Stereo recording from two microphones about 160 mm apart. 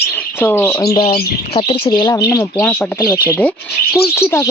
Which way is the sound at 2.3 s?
15° left (ahead or behind).